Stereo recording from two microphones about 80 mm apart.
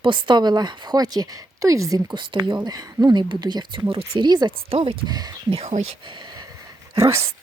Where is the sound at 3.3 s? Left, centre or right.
Right.